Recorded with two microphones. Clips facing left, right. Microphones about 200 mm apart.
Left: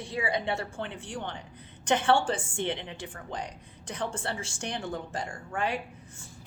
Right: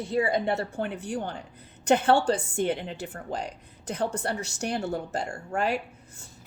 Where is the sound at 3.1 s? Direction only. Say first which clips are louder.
Right 4 dB; 40° right (ahead or behind).